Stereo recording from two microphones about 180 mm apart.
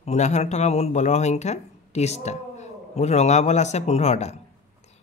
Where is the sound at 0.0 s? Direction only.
40° left (ahead or behind).